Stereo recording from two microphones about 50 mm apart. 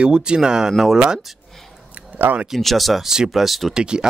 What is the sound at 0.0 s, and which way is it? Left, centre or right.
Speech, centre.